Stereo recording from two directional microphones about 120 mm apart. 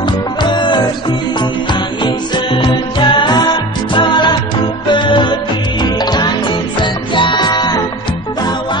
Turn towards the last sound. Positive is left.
turn(degrees=35)  # may be behind; listen again after turning